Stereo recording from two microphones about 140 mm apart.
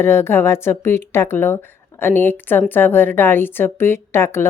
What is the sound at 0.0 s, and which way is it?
Speech, 15° left (ahead or behind).